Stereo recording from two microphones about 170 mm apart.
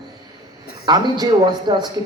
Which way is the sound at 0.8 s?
25° right (ahead or behind).